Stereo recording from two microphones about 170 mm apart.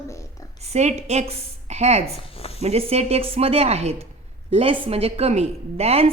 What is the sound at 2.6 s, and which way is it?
A woman's voice, 35° right (ahead or behind).